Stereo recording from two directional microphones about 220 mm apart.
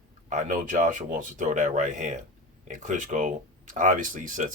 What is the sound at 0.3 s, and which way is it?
Speech, 35° right (ahead or behind).